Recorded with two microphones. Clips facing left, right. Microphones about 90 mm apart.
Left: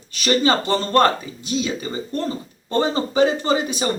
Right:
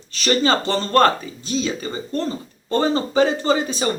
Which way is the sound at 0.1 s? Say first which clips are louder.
Even; 15° left (ahead or behind).